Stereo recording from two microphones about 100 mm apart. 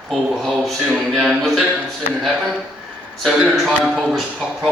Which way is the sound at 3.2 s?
5° right (ahead or behind).